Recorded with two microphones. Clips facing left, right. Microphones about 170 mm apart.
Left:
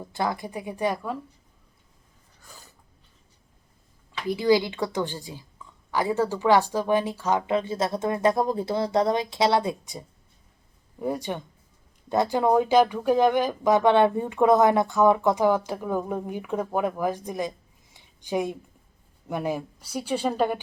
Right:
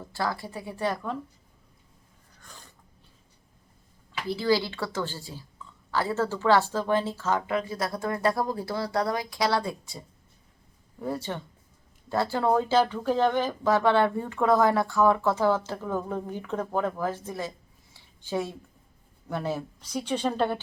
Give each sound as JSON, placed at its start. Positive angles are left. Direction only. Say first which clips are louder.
{"t": 0.0, "sound": "a woman's voice", "louder": "left 3 dB", "side_deg": 20}
{"t": 2.4, "sound": "a sound", "louder": "even", "side_deg": 5}
{"t": 4.3, "sound": "a woman's voice", "louder": "left 4 dB", "side_deg": 15}
{"t": 11.0, "sound": "a woman's voice", "louder": "left 3 dB", "side_deg": 15}
{"t": 17.9, "sound": "a sound", "louder": "left 3 dB", "side_deg": 15}
{"t": 19.3, "sound": "a woman's voice", "louder": "left 2 dB", "side_deg": 15}